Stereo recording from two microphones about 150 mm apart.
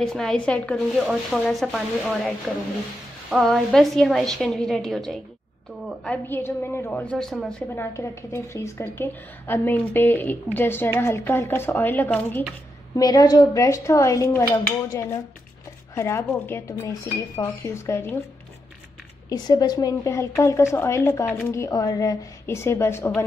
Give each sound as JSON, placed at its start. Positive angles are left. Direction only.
{"t": 0.0, "sound": "speech", "side_deg": 5}
{"t": 6.0, "sound": "a woman's voice", "side_deg": 15}
{"t": 7.7, "sound": "a woman's voice", "side_deg": 15}
{"t": 12.9, "sound": "a woman's voice", "side_deg": 25}
{"t": 19.2, "sound": "speech", "side_deg": 25}